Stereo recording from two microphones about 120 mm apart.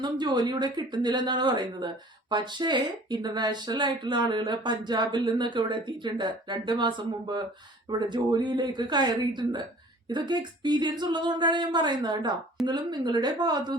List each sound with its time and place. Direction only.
0.0 s speech: 35° right (ahead or behind)